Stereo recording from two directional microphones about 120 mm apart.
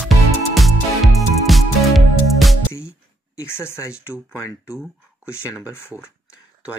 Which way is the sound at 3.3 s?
20° left (ahead or behind).